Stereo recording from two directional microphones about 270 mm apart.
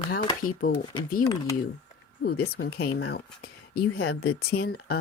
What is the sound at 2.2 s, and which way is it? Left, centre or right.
Speech, left.